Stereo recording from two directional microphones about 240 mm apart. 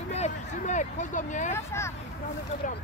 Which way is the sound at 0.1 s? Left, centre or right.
Left.